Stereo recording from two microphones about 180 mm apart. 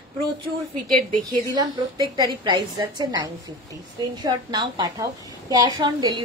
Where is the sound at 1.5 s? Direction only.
20° right (ahead or behind).